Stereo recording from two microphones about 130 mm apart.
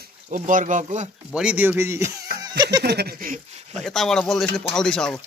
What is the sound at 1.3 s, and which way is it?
Speech, 10° right (ahead or behind).